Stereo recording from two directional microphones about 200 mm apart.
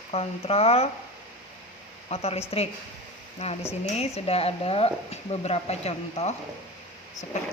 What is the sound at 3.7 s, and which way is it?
Speech, 30° left (ahead or behind).